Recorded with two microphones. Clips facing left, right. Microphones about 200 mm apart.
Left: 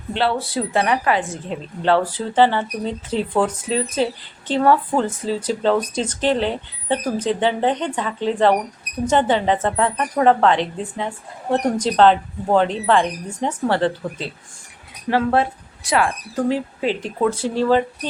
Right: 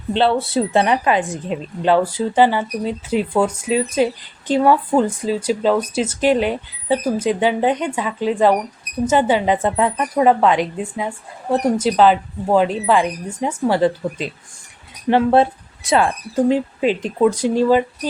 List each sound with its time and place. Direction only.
0.1 s speech: 25° right (ahead or behind)
15.1 s speech: 25° right (ahead or behind); by 18.1 s 10° right (ahead or behind)